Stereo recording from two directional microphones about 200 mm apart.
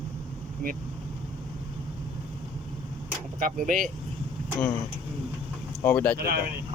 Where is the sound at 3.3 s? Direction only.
45° right (ahead or behind).